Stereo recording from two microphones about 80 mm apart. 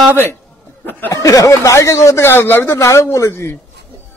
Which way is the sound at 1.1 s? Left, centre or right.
Left.